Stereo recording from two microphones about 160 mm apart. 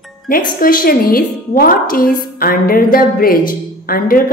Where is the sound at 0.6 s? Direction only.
65° left (ahead or behind).